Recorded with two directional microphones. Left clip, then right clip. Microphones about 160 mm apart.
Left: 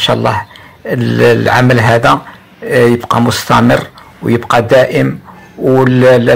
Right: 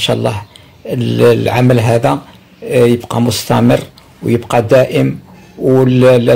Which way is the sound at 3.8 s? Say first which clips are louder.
Left 3 dB; 15° right (ahead or behind).